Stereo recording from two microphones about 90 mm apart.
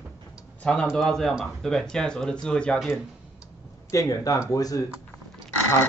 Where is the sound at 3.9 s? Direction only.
40° left (ahead or behind).